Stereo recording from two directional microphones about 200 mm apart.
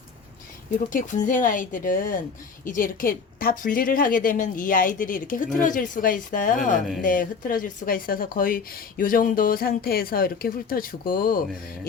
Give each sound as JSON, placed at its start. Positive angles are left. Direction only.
{"t": 0.9, "sound": "speech", "side_deg": 40}